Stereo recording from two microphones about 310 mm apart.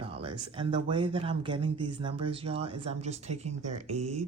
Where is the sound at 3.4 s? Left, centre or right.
Right.